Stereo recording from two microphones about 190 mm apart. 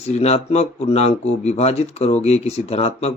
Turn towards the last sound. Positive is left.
turn(degrees=30)  # may be behind; listen again after turning